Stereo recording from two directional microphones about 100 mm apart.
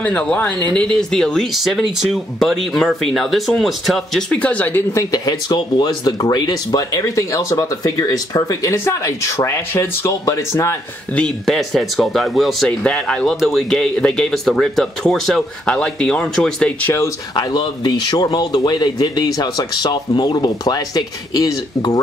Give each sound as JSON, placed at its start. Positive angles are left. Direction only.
{"t": 0.0, "sound": "speech", "side_deg": 15}
{"t": 4.4, "sound": "speech", "side_deg": 15}
{"t": 4.9, "sound": "speech", "side_deg": 40}
{"t": 11.1, "sound": "speech", "side_deg": 5}
{"t": 17.4, "sound": "speech", "side_deg": 45}